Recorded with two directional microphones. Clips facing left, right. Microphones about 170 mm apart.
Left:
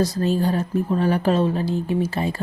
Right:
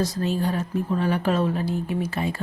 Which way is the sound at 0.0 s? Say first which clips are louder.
Left 4 dB; 35° left (ahead or behind).